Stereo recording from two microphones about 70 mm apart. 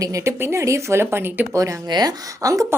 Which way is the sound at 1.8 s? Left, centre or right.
Right.